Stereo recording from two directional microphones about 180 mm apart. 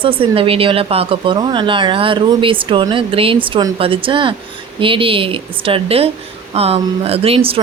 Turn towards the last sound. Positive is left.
turn(degrees=-30)  # may be behind; listen again after turning